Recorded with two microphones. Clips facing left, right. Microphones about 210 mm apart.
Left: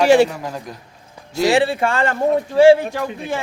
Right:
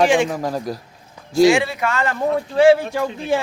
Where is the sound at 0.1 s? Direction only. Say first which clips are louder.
Left 5 dB; 40° left (ahead or behind).